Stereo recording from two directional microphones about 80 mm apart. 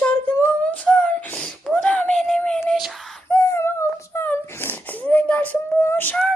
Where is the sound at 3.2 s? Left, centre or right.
Left.